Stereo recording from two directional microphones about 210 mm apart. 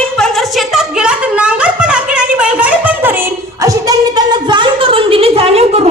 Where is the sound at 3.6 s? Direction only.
20° right (ahead or behind).